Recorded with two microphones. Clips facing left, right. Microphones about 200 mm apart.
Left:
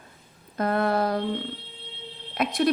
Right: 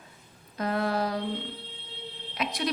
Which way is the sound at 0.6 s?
55° left (ahead or behind).